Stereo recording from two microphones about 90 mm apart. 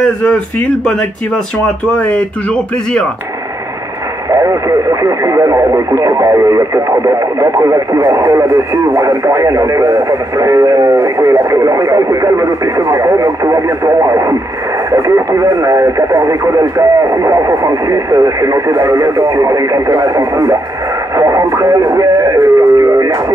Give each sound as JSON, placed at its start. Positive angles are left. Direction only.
{"t": 0.0, "sound": "speech", "side_deg": 5}
{"t": 2.0, "sound": "speech", "side_deg": 15}
{"t": 4.3, "sound": "speech", "side_deg": -35}
{"t": 21.2, "sound": "radio", "side_deg": -35}